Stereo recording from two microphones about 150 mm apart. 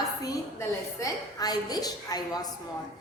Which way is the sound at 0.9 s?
25° left (ahead or behind).